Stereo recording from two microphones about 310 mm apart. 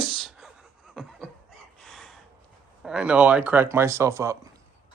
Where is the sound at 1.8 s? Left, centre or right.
Centre.